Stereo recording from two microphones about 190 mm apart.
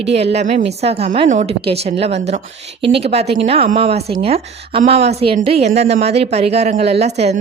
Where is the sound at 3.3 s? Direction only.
30° right (ahead or behind).